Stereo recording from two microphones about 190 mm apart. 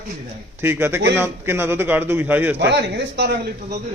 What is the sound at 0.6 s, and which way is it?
Speech, 10° right (ahead or behind).